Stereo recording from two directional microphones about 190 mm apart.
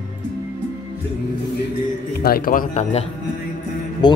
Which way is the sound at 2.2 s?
50° left (ahead or behind).